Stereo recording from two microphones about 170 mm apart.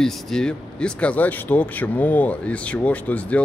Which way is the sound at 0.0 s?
5° left (ahead or behind).